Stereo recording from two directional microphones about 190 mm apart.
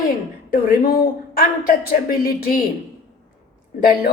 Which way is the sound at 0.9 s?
50° left (ahead or behind).